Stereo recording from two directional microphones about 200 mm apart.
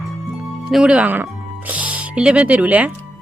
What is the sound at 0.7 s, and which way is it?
Speech, 5° right (ahead or behind).